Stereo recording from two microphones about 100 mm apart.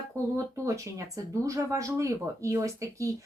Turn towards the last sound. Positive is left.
turn(degrees=-30)  # may be behind; listen again after turning